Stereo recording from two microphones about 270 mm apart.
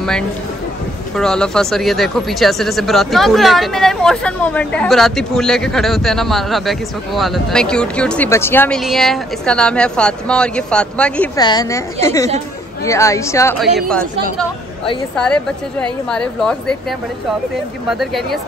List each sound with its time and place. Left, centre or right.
1.1 s speech: centre
11.3 s a woman's voice: centre
15.1 s speech: centre
17.8 s speech: centre